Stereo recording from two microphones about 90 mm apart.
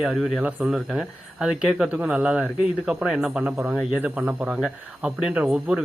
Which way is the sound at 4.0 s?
15° right (ahead or behind).